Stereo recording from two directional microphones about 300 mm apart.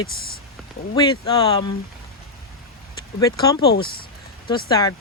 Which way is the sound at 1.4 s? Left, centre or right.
Centre.